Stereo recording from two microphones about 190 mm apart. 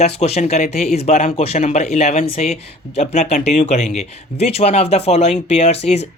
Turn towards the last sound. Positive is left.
turn(degrees=35)  # may be behind; listen again after turning